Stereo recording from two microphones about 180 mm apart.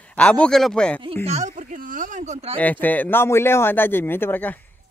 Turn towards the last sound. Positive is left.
turn(degrees=10)  # may be behind; listen again after turning